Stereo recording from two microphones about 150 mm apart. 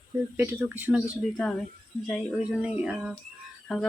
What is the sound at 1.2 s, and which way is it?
Speech, centre (ahead or behind).